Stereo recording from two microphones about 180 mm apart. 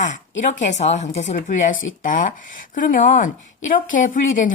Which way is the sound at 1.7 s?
90° left.